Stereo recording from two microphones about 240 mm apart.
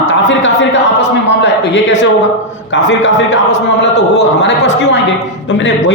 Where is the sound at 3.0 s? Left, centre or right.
Left.